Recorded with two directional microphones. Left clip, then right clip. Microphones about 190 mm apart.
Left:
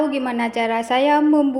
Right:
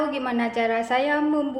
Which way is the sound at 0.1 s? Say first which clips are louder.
Left 3 dB; 25° left (ahead or behind).